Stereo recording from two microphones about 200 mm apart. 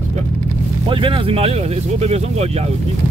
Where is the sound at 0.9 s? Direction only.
25° right (ahead or behind).